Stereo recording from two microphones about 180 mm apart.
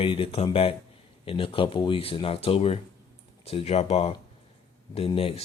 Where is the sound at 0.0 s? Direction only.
30° left (ahead or behind).